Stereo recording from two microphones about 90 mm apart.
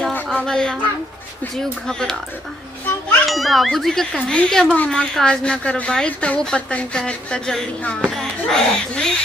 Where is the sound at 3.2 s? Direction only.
Centre (ahead or behind).